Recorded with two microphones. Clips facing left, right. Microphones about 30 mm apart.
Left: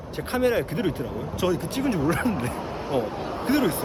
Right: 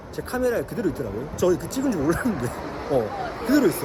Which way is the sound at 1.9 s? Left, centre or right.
Left.